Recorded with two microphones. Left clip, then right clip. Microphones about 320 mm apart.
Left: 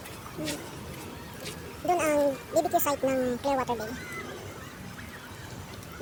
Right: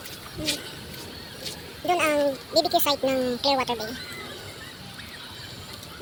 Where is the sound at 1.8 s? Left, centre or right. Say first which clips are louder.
Right 2 dB; left.